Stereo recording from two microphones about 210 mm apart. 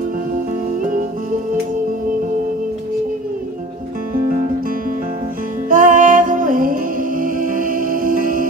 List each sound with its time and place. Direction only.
5.7 s music: 40° right (ahead or behind)